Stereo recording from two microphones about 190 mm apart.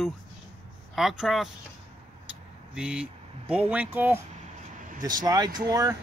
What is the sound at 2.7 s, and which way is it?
Speech, 5° right (ahead or behind).